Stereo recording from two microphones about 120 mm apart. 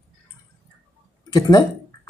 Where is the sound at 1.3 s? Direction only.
30° left (ahead or behind).